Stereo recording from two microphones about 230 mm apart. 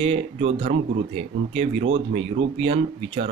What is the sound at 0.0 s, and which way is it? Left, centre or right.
Speech, right.